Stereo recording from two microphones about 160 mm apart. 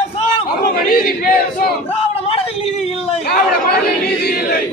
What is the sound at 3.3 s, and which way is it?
Chatter, 80° left.